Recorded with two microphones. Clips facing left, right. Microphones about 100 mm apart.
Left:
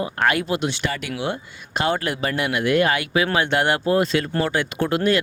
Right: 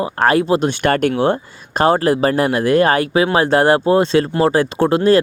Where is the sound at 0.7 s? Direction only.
55° right (ahead or behind).